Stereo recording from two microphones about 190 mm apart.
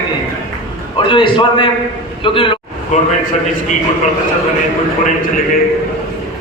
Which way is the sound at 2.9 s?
40° left (ahead or behind).